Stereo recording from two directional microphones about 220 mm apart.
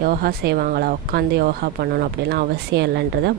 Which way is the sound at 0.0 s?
45° right (ahead or behind).